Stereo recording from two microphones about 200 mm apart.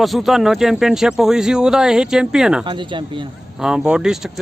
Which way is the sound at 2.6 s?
25° right (ahead or behind).